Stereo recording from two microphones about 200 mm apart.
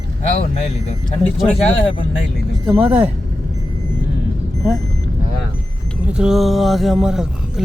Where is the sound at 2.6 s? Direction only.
10° right (ahead or behind).